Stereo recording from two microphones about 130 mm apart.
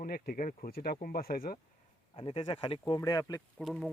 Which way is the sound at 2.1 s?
45° left (ahead or behind).